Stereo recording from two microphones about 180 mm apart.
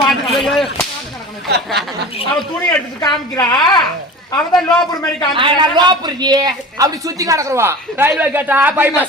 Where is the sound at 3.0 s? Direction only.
25° left (ahead or behind).